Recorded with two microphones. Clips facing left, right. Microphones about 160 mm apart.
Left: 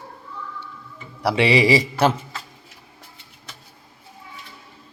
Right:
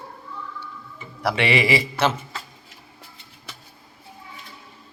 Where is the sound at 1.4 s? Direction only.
35° left (ahead or behind).